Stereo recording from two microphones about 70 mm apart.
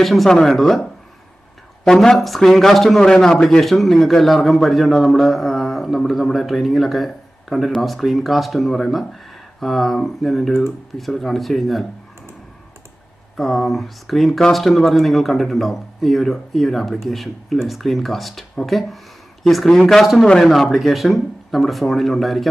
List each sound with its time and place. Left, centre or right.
0.0 s a man's voice: centre
1.9 s a man's voice: centre
13.4 s a man's voice: centre